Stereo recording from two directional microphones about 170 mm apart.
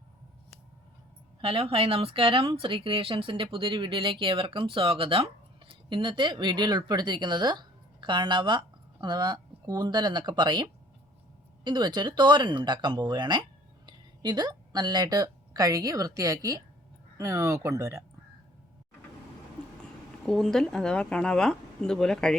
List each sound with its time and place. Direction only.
1.4 s speech: 30° right (ahead or behind); by 18.0 s 15° right (ahead or behind)
20.2 s speech: centre (ahead or behind)